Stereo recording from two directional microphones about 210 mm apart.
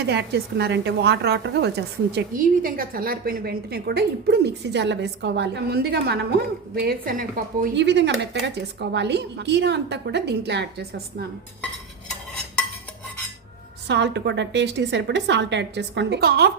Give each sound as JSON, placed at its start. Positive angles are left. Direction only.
{"t": 0.1, "sound": "a woman's voice", "side_deg": -55}
{"t": 13.8, "sound": "a woman's voice", "side_deg": -55}